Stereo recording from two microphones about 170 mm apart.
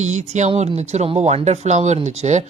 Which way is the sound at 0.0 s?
45° right (ahead or behind).